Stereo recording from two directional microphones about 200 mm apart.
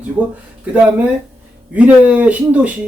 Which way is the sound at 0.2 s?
5° right (ahead or behind).